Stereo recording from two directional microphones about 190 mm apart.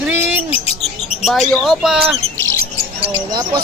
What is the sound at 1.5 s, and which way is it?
Speech, centre (ahead or behind).